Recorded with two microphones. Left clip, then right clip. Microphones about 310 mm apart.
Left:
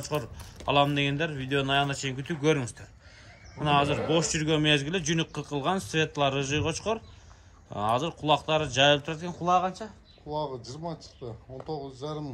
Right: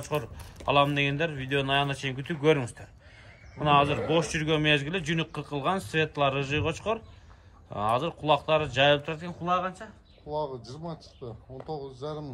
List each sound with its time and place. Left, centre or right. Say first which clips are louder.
0.0 s a man's voice: even; centre
10.3 s speech: even; left